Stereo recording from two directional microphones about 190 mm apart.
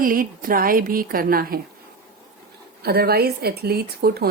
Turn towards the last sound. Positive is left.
turn(degrees=-55)  # may be behind; listen again after turning